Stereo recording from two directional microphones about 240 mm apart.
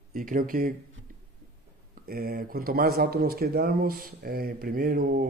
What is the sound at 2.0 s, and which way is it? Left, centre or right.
Speech, right.